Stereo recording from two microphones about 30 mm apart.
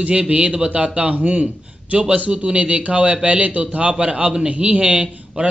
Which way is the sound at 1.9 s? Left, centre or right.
Right.